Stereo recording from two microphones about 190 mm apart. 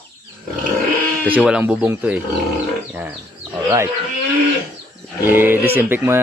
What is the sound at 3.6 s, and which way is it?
Speech, 15° right (ahead or behind).